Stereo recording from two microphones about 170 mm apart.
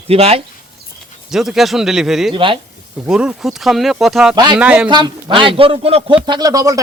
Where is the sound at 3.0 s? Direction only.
5° right (ahead or behind).